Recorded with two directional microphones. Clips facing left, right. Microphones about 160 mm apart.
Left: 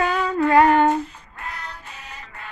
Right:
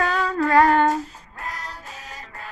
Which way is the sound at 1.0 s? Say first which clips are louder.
Left 2 dB; 40° right (ahead or behind).